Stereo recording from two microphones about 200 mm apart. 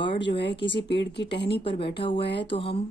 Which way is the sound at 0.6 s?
60° left (ahead or behind).